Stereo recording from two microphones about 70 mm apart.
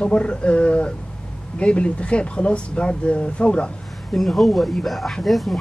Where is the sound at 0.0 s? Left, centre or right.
Centre.